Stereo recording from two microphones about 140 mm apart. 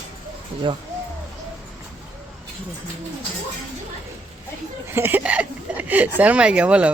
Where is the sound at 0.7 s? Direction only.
35° right (ahead or behind).